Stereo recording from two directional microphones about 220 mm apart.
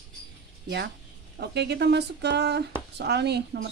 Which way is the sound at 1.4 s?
50° right (ahead or behind).